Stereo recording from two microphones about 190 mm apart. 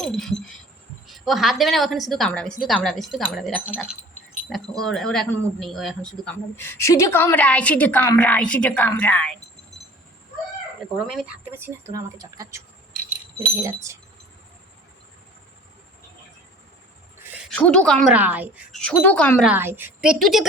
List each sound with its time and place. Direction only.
0.0 s a woman's voice: centre (ahead or behind)
11.2 s speech: 10° right (ahead or behind)
17.5 s a woman's voice: 5° left (ahead or behind)
18.1 s speech: 10° right (ahead or behind)
18.8 s a woman's voice: 5° left (ahead or behind)
19.5 s a woman's voice: 10° right (ahead or behind)